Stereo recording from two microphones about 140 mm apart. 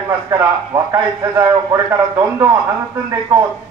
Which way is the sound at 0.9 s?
25° right (ahead or behind).